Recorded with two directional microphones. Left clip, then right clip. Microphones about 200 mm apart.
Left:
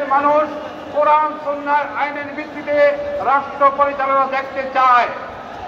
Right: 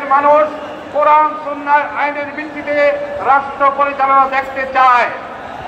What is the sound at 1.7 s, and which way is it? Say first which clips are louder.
A man's voice: right 6 dB; 55° right (ahead or behind).